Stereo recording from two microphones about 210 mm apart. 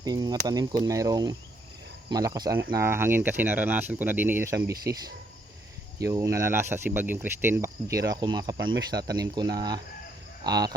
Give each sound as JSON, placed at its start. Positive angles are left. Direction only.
{"t": 0.0, "sound": "speech", "side_deg": -20}